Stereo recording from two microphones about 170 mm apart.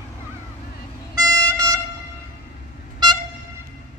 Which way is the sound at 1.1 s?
20° right (ahead or behind).